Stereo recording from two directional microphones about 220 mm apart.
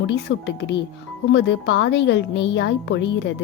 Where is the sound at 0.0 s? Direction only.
55° left (ahead or behind).